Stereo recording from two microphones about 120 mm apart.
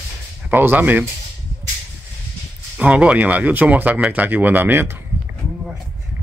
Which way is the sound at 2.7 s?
10° right (ahead or behind).